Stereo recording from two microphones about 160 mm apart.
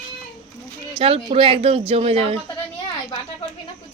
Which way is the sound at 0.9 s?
35° right (ahead or behind).